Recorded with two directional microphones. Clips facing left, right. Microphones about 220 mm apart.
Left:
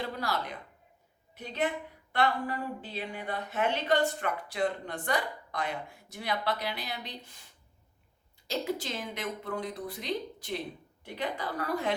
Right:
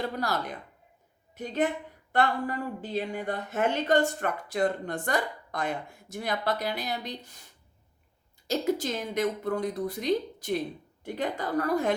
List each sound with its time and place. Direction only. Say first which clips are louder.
0.2 s a woman's voice: right 3 dB; 45° right (ahead or behind)
8.4 s a woman's voice: right 5 dB; 45° right (ahead or behind)